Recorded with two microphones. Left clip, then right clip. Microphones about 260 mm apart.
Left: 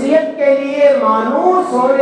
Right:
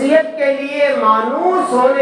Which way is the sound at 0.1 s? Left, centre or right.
Right.